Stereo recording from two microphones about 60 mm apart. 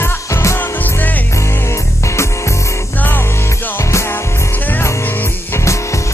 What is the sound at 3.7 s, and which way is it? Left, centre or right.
Music, left.